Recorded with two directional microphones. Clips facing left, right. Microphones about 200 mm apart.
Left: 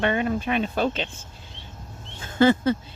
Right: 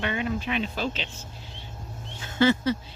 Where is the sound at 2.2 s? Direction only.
50° left (ahead or behind).